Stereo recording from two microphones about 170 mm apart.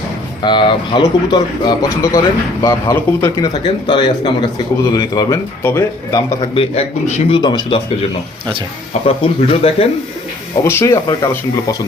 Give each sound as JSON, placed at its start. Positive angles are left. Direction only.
{"t": 0.4, "sound": "speech", "side_deg": 30}
{"t": 6.5, "sound": "a man's voice", "side_deg": 35}
{"t": 9.0, "sound": "a man's voice", "side_deg": 35}
{"t": 10.6, "sound": "speech", "side_deg": 15}